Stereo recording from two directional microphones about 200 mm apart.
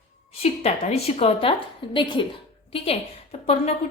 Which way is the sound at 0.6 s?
30° left (ahead or behind).